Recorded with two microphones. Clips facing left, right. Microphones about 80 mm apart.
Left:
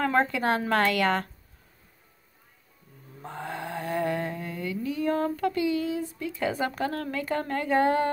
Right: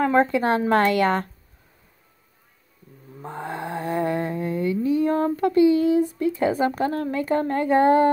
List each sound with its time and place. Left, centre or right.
0.0 s speech: right
3.2 s mantra: right
6.1 s speech: right
6.8 s speech: right